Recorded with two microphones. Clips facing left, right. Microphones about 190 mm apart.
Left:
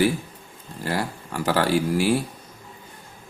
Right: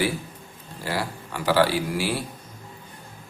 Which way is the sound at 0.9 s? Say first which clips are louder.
Left 2 dB; 45° left (ahead or behind).